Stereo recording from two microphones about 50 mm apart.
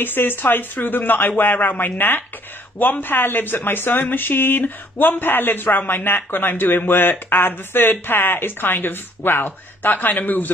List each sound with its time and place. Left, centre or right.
0.0 s speech: left